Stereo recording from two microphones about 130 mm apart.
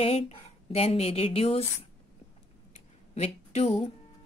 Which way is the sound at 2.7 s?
55° left (ahead or behind).